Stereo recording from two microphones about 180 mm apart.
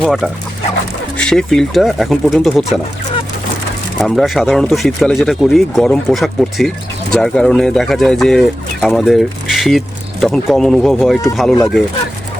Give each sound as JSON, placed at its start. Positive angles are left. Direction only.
{"t": 0.0, "sound": "speech", "side_deg": 0}
{"t": 4.0, "sound": "speech", "side_deg": 0}